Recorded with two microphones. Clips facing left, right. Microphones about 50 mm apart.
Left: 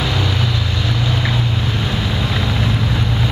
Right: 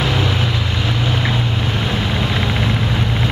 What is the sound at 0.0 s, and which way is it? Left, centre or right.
Vehicle, centre.